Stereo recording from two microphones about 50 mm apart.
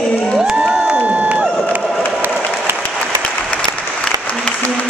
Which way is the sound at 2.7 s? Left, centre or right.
Right.